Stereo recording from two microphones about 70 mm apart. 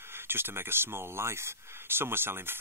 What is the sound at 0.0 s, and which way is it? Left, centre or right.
Speech, right.